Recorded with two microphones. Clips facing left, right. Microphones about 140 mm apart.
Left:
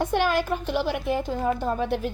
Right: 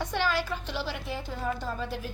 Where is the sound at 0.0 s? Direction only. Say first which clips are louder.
Left 6 dB; 50° left (ahead or behind).